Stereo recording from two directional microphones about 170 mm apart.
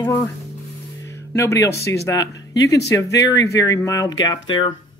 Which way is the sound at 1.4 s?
15° left (ahead or behind).